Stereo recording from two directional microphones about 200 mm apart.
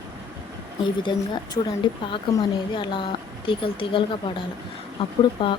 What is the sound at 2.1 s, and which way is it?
Speech, 25° left (ahead or behind).